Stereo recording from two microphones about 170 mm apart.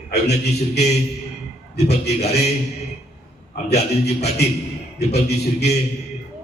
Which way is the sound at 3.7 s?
40° left (ahead or behind).